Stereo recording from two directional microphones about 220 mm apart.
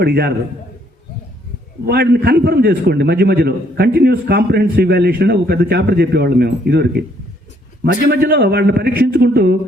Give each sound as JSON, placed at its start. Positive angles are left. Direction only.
{"t": 0.0, "sound": "a man's voice", "side_deg": -45}
{"t": 1.9, "sound": "a man's voice", "side_deg": -45}
{"t": 8.1, "sound": "a man's voice", "side_deg": -45}